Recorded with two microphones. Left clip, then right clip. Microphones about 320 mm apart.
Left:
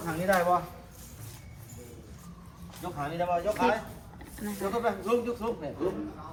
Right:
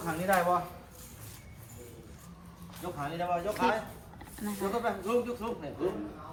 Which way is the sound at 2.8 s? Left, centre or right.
Centre.